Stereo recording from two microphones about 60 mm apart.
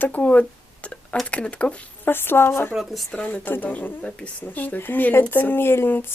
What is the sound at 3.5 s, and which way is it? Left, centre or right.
Speech, left.